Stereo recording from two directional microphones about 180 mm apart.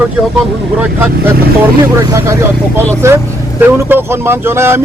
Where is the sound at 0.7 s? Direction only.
10° right (ahead or behind).